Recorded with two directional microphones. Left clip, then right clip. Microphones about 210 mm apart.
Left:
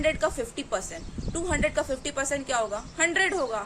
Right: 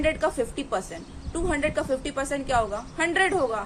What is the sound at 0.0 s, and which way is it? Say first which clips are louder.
A woman's voice: right 2 dB; 15° left (ahead or behind).